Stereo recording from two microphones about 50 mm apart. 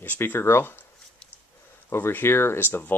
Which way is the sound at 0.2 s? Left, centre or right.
Left.